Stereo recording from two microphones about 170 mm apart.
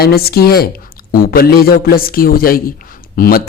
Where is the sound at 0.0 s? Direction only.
65° left (ahead or behind).